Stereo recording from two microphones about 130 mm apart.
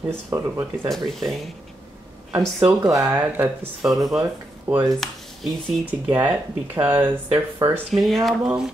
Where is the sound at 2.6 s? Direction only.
20° right (ahead or behind).